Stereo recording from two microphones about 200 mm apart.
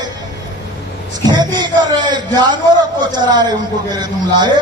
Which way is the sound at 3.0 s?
20° right (ahead or behind).